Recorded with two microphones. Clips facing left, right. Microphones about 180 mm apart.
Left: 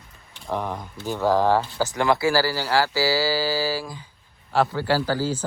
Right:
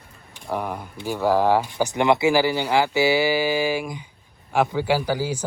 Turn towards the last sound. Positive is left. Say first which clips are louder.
# even
turn(degrees=-15)  # may be behind; listen again after turning